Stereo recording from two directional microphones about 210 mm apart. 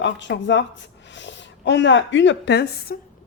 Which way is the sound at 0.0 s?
60° left (ahead or behind).